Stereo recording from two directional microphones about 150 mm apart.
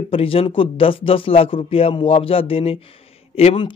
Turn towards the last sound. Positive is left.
turn(degrees=35)  # may be behind; listen again after turning